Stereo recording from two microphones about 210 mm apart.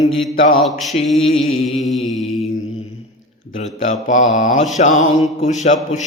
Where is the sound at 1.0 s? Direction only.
30° left (ahead or behind).